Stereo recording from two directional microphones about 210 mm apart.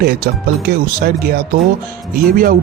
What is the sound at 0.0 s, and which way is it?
A man's voice, 45° right (ahead or behind).